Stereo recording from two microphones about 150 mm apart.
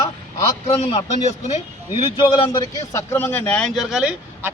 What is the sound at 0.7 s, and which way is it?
Speech, 40° left (ahead or behind).